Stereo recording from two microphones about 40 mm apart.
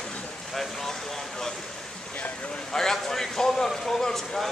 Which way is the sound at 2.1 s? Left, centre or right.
Left.